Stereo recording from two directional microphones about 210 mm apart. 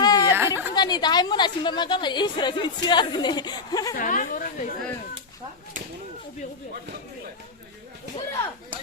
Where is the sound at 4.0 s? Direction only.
40° left (ahead or behind).